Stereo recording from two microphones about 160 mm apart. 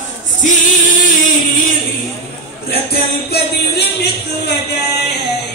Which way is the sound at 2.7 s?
80° left.